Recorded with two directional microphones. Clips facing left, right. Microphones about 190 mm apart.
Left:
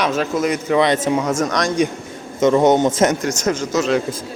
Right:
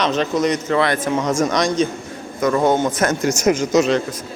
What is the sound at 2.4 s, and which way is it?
Speech, 20° left (ahead or behind).